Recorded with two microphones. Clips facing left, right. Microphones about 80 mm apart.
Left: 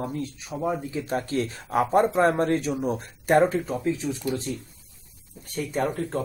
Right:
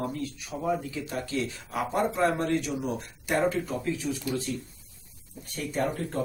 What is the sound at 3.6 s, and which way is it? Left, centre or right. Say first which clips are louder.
Speech: left 4 dB; left.